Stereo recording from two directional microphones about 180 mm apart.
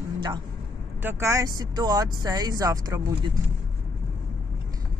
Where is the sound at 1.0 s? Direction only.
15° right (ahead or behind).